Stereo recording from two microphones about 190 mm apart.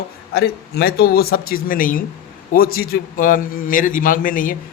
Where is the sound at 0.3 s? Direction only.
55° left (ahead or behind).